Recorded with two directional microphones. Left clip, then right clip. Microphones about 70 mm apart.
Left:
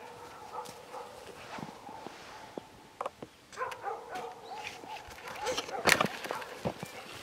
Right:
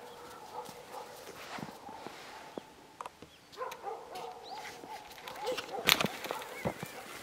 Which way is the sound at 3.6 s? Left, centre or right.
Left.